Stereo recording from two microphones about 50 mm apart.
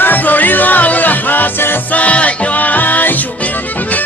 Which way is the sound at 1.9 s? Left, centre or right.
Left.